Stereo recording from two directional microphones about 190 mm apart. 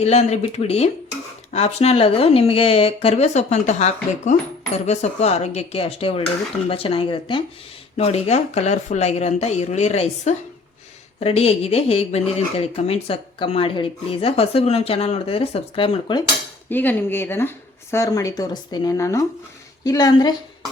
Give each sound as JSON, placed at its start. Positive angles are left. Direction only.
{"t": 0.0, "sound": "speech", "side_deg": 35}
{"t": 16.6, "sound": "speech", "side_deg": 10}